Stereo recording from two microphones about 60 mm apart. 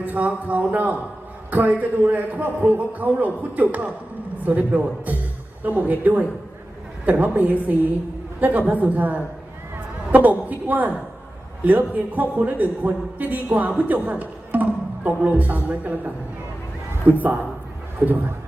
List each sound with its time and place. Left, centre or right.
0.0 s a man's voice: right
17.1 s a man's voice: right